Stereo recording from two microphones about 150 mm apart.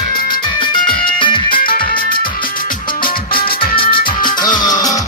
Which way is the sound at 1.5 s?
70° left (ahead or behind).